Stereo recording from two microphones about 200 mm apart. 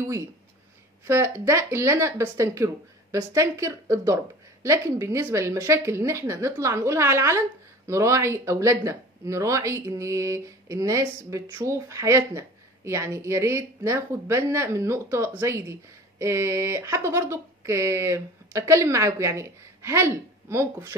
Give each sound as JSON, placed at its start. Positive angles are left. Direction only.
{"t": 1.0, "sound": "a woman's voice", "side_deg": -15}